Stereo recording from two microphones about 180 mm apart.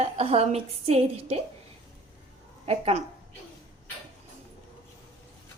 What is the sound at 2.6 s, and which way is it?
Speech, 35° right (ahead or behind).